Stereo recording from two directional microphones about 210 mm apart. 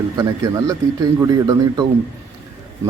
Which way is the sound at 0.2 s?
15° right (ahead or behind).